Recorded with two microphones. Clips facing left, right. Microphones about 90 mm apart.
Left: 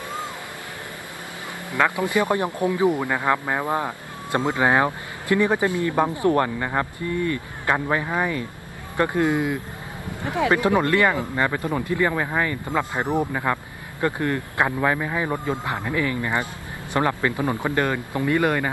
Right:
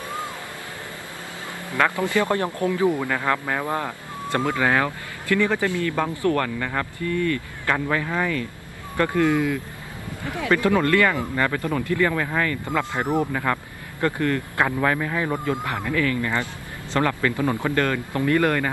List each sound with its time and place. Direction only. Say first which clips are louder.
1.7 s speech: even; 20° left (ahead or behind)